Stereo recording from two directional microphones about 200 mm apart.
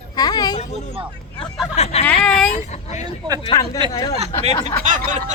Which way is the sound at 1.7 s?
30° left (ahead or behind).